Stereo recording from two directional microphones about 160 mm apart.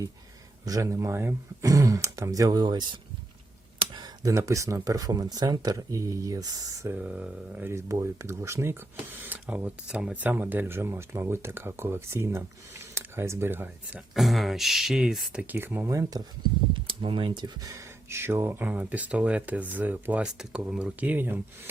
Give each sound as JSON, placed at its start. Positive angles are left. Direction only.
{"t": 0.6, "sound": "speech", "side_deg": -20}
{"t": 6.9, "sound": "speech", "side_deg": -5}
{"t": 14.1, "sound": "speech", "side_deg": 0}
{"t": 16.8, "sound": "speech", "side_deg": -30}